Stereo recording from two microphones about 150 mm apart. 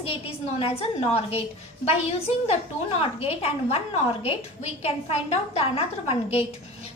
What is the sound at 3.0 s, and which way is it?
A woman's voice, 40° left (ahead or behind).